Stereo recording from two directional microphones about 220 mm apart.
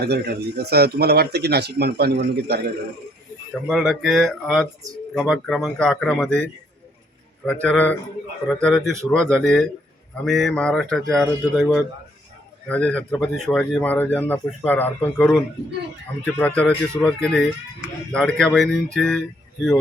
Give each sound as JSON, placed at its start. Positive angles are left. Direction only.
{"t": 0.0, "sound": "speech", "side_deg": -45}
{"t": 3.7, "sound": "speech", "side_deg": 0}